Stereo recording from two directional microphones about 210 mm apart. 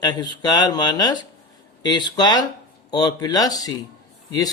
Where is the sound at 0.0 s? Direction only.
20° left (ahead or behind).